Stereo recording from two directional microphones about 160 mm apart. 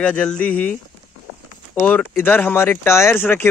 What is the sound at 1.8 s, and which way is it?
Speech, 10° left (ahead or behind).